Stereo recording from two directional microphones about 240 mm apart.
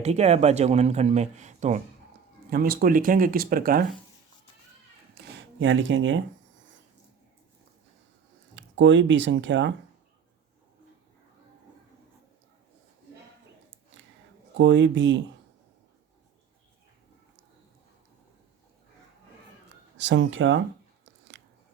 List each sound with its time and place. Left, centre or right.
0.0 s speech: right
5.1 s a sound: right
8.5 s speech: right
14.6 s speech: right
20.0 s speech: right
21.0 s a sound: right